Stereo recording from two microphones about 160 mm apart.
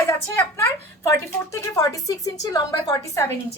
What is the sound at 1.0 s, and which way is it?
A woman's voice, 15° left (ahead or behind).